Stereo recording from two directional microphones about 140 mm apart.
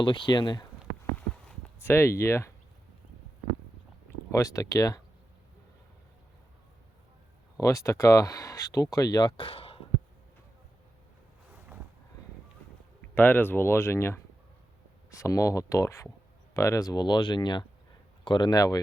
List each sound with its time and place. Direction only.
0.0 s speech: 35° left (ahead or behind)
1.8 s speech: 15° left (ahead or behind)
4.3 s speech: 25° left (ahead or behind)
7.6 s speech: 20° left (ahead or behind); by 9.8 s 40° left (ahead or behind)
13.1 s speech: 15° left (ahead or behind)